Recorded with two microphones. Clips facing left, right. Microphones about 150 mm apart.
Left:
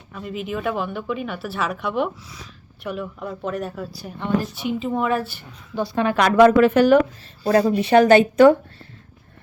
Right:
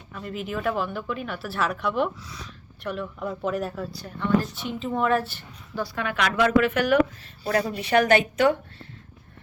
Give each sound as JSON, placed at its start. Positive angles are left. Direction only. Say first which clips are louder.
{"t": 0.1, "sound": "a woman's voice", "louder": "left 3 dB", "side_deg": 5}
{"t": 5.7, "sound": "a woman's voice", "louder": "left 8 dB", "side_deg": 25}